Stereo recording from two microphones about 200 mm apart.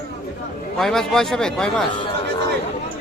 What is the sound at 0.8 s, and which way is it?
A man's voice, centre (ahead or behind).